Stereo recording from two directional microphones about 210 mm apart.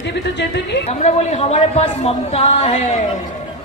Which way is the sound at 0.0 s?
55° left (ahead or behind).